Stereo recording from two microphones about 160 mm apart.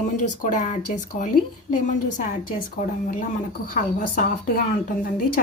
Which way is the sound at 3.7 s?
60° left (ahead or behind).